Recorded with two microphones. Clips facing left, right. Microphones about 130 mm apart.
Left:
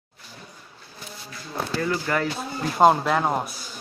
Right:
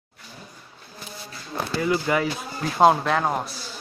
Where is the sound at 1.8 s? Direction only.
10° right (ahead or behind).